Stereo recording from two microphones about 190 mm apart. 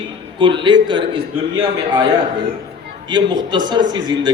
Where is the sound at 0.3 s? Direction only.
25° right (ahead or behind).